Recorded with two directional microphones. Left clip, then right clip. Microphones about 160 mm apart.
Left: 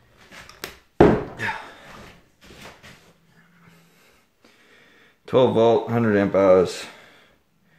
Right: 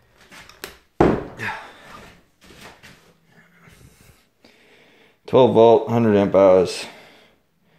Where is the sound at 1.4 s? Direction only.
10° right (ahead or behind).